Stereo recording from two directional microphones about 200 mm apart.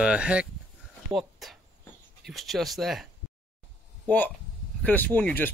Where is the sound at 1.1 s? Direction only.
Centre (ahead or behind).